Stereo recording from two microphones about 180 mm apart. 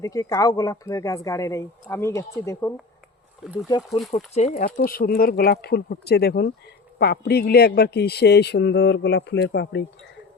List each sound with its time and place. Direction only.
0.0 s speech: 20° left (ahead or behind)
3.8 s speech: centre (ahead or behind)
4.4 s speech: 40° left (ahead or behind)
4.9 s speech: 55° left (ahead or behind)